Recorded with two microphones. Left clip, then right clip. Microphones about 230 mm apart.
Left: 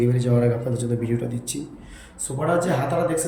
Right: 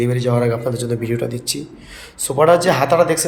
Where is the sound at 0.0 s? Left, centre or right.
Centre.